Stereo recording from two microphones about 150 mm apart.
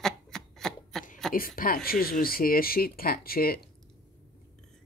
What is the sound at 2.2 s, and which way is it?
Speech, 75° left (ahead or behind).